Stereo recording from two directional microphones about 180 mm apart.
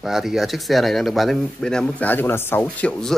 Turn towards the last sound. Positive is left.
turn(degrees=5)  # may be behind; listen again after turning